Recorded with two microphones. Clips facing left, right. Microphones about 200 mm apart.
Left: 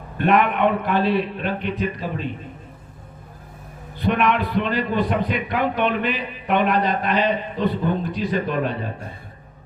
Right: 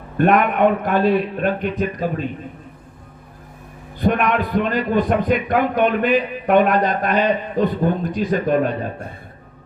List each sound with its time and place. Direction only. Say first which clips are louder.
0.2 s a man's voice: right 3 dB; 45° right (ahead or behind)
4.0 s a man's voice: right 2 dB; 45° right (ahead or behind)